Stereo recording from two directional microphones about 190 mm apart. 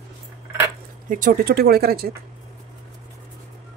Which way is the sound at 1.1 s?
45° right (ahead or behind).